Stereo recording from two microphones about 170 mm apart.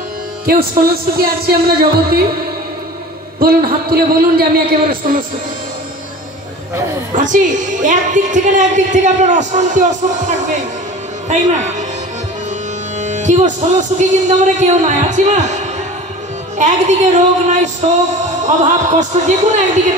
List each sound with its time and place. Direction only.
0.5 s a man's voice: 60° right (ahead or behind)
3.3 s a man's voice: 65° right (ahead or behind)
7.2 s a woman's voice: 50° right (ahead or behind)
13.0 s a woman's voice: 45° right (ahead or behind)